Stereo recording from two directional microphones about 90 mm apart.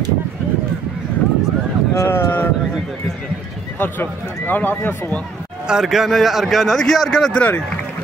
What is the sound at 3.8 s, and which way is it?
Speech, 20° left (ahead or behind).